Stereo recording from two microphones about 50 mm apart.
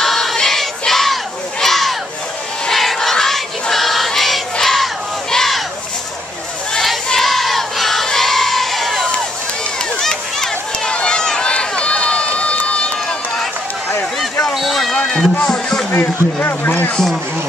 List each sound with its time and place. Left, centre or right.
0.0 s battle cry: centre
2.7 s crowd: centre
3.7 s battle cry: centre
7.1 s crowd: centre
9.9 s run: centre
14.5 s a sound: centre
15.9 s speech: left